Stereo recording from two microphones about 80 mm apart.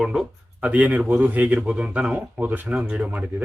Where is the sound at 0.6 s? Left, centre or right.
Centre.